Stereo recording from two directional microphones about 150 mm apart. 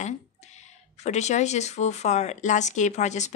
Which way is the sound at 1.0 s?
50° left (ahead or behind).